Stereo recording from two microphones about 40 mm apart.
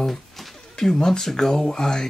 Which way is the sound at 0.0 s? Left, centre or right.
Centre.